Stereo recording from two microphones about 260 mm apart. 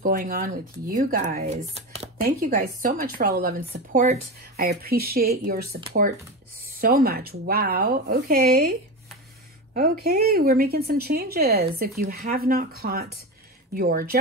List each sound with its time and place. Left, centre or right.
0.0 s speech: right
6.8 s speech: right
9.8 s speech: right